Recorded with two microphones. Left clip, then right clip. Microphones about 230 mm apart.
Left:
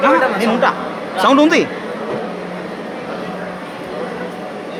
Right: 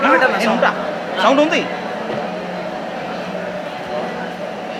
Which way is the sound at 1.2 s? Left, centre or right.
Left.